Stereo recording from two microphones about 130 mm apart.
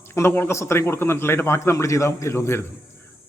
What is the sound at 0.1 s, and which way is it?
A man's voice, 20° left (ahead or behind).